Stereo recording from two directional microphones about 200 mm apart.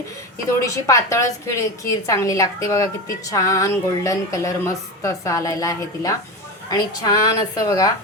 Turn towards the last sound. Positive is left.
turn(degrees=15)  # may be behind; listen again after turning